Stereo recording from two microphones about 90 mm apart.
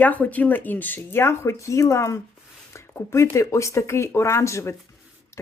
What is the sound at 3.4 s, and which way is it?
Speech, 35° left (ahead or behind).